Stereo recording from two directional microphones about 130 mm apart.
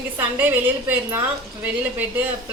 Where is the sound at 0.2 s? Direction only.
15° right (ahead or behind).